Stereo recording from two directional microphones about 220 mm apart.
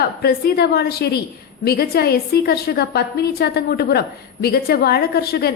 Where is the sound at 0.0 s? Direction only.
45° left (ahead or behind).